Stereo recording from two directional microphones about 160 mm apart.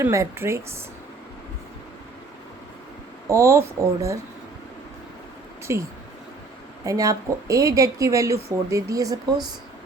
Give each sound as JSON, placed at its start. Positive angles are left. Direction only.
{"t": 0.0, "sound": "speech", "side_deg": -15}
{"t": 3.2, "sound": "speech", "side_deg": -20}
{"t": 5.7, "sound": "a woman's voice", "side_deg": -15}